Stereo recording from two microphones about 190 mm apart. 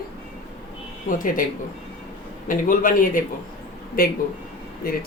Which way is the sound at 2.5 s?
45° left (ahead or behind).